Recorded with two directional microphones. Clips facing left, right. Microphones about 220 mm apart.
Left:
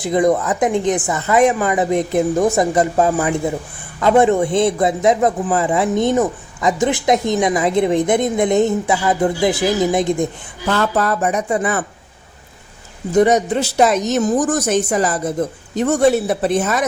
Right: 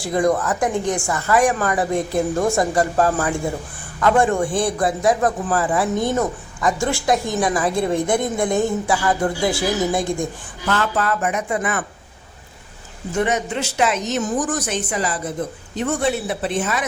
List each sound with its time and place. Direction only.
0.0 s a man's voice: 20° left (ahead or behind)
10.7 s speech: 40° left (ahead or behind)
13.1 s a man's voice: 40° left (ahead or behind)